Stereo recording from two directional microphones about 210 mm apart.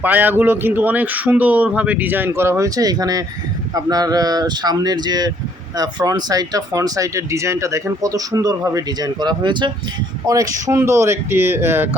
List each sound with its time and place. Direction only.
0.0 s speech: 10° right (ahead or behind)